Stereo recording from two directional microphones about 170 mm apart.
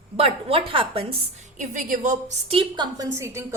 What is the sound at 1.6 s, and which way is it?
Speech, 50° right (ahead or behind).